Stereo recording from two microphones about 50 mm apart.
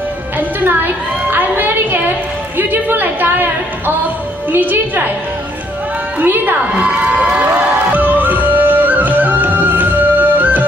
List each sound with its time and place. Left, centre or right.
0.4 s music: right
1.3 s a sound: right
4.5 s a woman's voice: right
6.1 s a woman's voice: right
6.8 s cheering: right
7.9 s music: right